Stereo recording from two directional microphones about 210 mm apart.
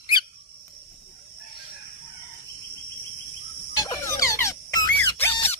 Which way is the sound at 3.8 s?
15° left (ahead or behind).